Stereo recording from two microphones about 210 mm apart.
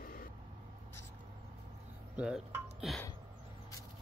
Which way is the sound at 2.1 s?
5° right (ahead or behind).